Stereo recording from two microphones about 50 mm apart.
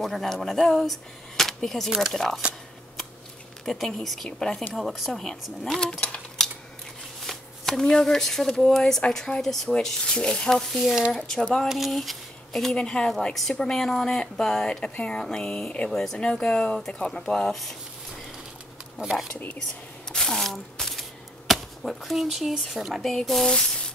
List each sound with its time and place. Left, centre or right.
0.0 s speech: centre
3.6 s speech: centre
4.3 s speech: centre
4.7 s speech: centre
5.2 s speech: centre
7.2 s speech: centre
10.5 s speech: centre
11.2 s speech: centre
11.7 s speech: centre
12.7 s speech: centre
13.3 s speech: centre
17.5 s speech: centre
20.1 s a sound: centre
21.5 s speech: centre